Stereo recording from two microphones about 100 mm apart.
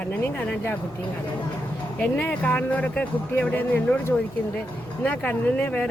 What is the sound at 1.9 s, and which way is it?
Speech, 15° left (ahead or behind).